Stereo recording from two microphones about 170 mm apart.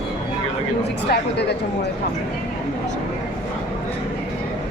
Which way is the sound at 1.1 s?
75° left (ahead or behind).